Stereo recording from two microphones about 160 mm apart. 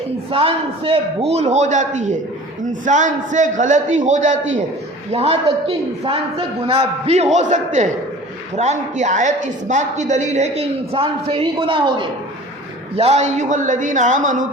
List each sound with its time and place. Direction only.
0.3 s a man's voice: 35° right (ahead or behind)
5.1 s a man's voice: 40° right (ahead or behind)
13.0 s a man's voice: 45° right (ahead or behind)